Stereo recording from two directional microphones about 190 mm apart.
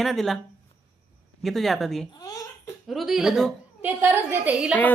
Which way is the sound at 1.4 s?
Centre (ahead or behind).